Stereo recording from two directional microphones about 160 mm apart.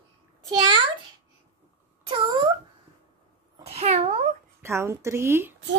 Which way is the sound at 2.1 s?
30° right (ahead or behind).